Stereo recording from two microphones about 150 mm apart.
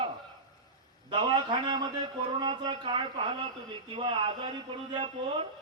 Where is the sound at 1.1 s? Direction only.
30° right (ahead or behind).